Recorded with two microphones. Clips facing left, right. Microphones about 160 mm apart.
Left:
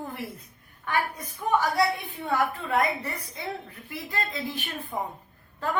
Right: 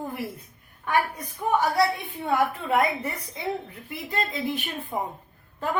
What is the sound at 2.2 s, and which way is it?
A woman's voice, 15° right (ahead or behind).